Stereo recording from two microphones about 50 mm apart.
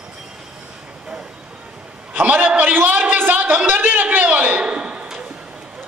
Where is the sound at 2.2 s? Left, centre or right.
Right.